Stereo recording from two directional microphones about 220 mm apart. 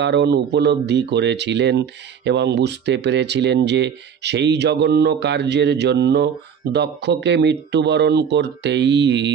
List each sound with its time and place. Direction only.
0.0 s speech: 50° right (ahead or behind)